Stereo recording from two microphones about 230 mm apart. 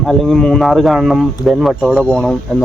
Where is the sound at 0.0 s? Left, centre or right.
Centre.